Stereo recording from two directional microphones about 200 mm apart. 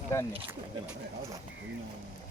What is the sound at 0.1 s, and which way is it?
Speech, 15° left (ahead or behind).